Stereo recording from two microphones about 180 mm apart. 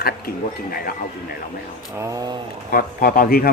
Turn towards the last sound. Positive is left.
turn(degrees=55)  # may be behind; listen again after turning